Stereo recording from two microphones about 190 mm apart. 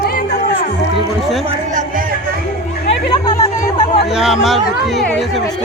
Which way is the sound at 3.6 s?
35° left (ahead or behind).